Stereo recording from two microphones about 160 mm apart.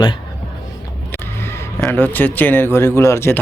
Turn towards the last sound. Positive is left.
turn(degrees=15)  # may be behind; listen again after turning